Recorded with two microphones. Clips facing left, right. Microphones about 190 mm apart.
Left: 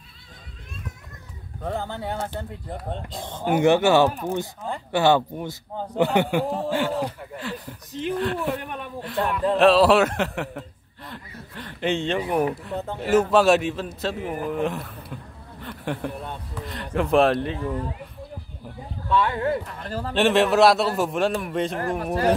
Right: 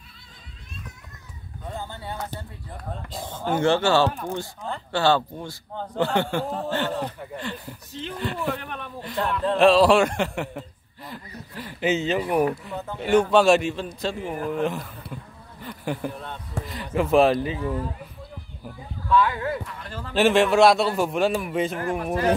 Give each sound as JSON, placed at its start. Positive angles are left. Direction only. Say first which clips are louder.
{"t": 1.6, "sound": "speech", "louder": "left 6 dB", "side_deg": 65}
{"t": 3.4, "sound": "a man's voice", "louder": "left 3 dB", "side_deg": 15}
{"t": 8.6, "sound": "speech", "louder": "left 2 dB", "side_deg": 10}
{"t": 9.0, "sound": "a man's voice", "louder": "left 2 dB", "side_deg": 0}
{"t": 12.7, "sound": "speech", "louder": "left 3 dB", "side_deg": 30}
{"t": 13.0, "sound": "a man's voice", "louder": "even", "side_deg": 5}
{"t": 19.0, "sound": "speech", "louder": "even", "side_deg": 25}
{"t": 19.6, "sound": "a man's voice", "louder": "left 5 dB", "side_deg": 45}
{"t": 20.2, "sound": "a man's voice", "louder": "right 1 dB", "side_deg": 0}
{"t": 22.0, "sound": "a man's voice", "louder": "left 1 dB", "side_deg": 35}